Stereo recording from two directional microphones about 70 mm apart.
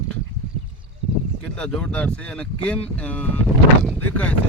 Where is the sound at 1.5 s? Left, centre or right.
Centre.